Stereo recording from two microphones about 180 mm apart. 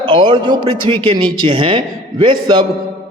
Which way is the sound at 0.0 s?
25° right (ahead or behind).